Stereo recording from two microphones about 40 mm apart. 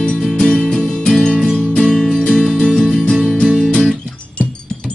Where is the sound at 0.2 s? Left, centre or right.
Centre.